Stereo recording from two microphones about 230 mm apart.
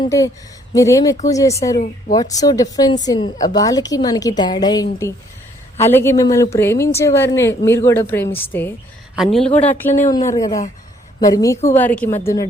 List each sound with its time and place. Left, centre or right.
0.0 s a woman's voice: centre